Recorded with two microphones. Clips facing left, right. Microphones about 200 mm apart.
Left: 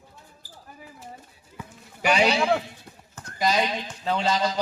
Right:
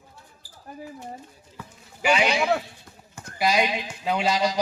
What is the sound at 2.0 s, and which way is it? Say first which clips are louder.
Speech: left 1 dB; 40° left (ahead or behind).